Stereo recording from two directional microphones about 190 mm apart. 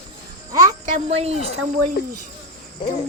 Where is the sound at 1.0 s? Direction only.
35° right (ahead or behind).